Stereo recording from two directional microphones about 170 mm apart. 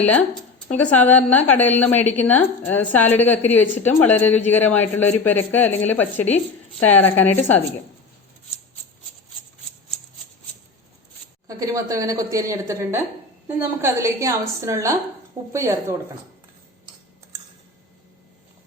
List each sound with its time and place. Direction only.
0.7 s a woman's voice: 5° left (ahead or behind)
11.4 s a woman's voice: 20° right (ahead or behind)